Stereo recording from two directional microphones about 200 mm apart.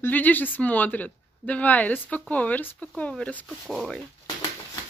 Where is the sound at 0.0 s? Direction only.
10° left (ahead or behind).